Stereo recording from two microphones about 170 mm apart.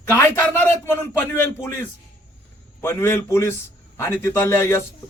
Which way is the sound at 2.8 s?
15° left (ahead or behind).